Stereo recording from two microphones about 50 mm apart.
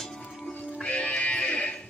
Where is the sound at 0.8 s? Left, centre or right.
Left.